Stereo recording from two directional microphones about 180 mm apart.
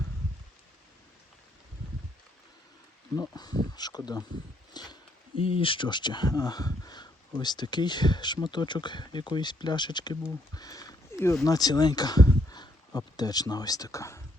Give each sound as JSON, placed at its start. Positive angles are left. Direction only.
{"t": 3.2, "sound": "speech", "side_deg": 20}
{"t": 10.5, "sound": "a sound", "side_deg": 20}
{"t": 11.4, "sound": "speech", "side_deg": 20}